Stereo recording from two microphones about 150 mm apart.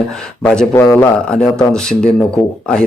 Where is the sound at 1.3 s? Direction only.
5° left (ahead or behind).